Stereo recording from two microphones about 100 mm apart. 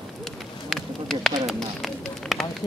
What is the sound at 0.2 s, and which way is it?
Run, 5° left (ahead or behind).